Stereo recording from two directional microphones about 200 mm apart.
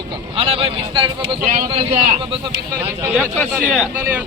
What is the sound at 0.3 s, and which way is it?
Speech, 30° right (ahead or behind).